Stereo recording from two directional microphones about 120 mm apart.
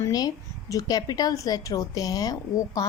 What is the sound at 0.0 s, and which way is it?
A woman's voice, 30° left (ahead or behind).